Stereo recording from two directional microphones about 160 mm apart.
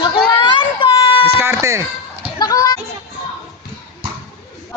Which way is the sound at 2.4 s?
25° left (ahead or behind).